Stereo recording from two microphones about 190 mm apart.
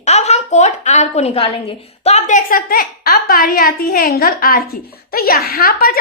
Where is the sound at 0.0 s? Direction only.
35° left (ahead or behind).